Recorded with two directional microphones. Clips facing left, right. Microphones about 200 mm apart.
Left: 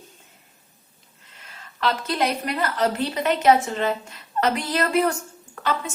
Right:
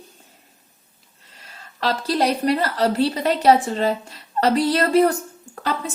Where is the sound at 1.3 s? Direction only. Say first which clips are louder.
Right 1 dB; 35° right (ahead or behind).